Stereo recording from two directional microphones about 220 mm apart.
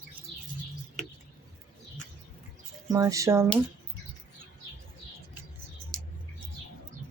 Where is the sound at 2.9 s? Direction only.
15° right (ahead or behind).